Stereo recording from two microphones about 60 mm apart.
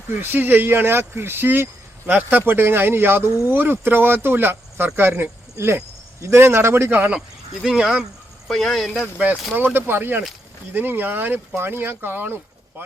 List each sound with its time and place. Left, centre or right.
0.1 s speech: right
7.6 s speech: centre
8.4 s speech: centre
9.6 s speech: right